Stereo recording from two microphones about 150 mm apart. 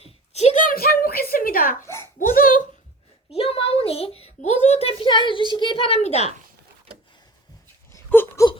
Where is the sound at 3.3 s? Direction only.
40° left (ahead or behind).